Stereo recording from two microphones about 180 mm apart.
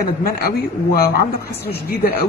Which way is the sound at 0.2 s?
60° left (ahead or behind).